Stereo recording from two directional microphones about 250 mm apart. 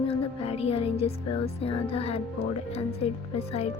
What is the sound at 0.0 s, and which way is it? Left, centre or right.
Music, left.